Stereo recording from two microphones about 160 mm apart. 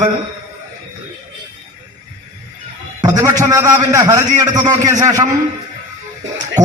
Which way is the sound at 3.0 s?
20° right (ahead or behind).